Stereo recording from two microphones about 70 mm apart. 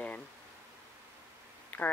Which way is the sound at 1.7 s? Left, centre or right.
Centre.